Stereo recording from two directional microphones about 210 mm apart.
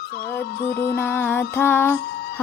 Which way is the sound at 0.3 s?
50° left (ahead or behind).